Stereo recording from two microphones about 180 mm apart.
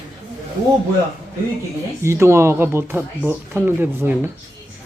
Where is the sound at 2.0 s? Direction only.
15° right (ahead or behind).